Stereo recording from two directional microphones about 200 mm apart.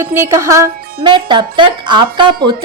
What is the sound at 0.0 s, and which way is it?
Music, 15° right (ahead or behind).